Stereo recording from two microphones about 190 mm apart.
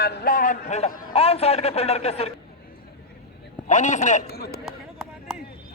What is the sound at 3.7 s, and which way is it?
Speech, 40° left (ahead or behind).